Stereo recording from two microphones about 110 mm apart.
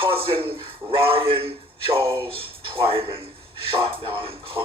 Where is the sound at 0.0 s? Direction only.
55° right (ahead or behind).